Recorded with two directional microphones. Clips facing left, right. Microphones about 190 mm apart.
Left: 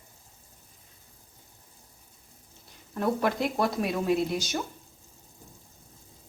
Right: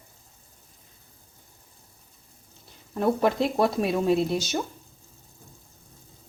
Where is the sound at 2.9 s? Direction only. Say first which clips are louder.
Right 4 dB; 25° right (ahead or behind).